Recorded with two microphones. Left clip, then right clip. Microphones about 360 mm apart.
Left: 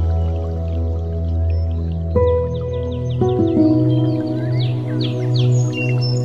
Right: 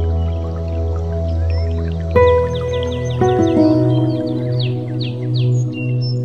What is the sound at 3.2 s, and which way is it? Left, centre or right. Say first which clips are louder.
Music: right 3 dB; right.